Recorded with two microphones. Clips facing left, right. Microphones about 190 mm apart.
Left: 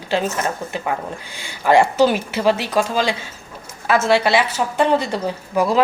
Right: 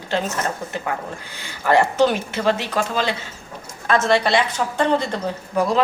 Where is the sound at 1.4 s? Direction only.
15° left (ahead or behind).